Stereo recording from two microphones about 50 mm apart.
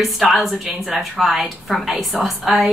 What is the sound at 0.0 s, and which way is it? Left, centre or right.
A woman's voice, centre.